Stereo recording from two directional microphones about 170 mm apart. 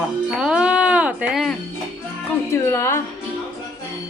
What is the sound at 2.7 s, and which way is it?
Speech, 15° left (ahead or behind).